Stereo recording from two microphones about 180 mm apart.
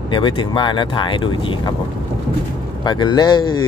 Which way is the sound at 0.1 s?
25° left (ahead or behind).